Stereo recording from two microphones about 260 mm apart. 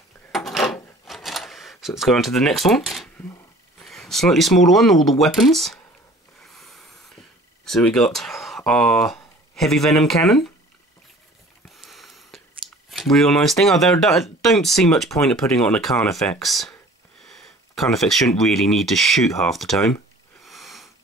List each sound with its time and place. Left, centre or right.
0.3 s drawer open or close: centre
3.8 s speech: centre
6.4 s a sound: centre
11.7 s a sound: centre
12.9 s speech: centre
20.4 s wheeze: centre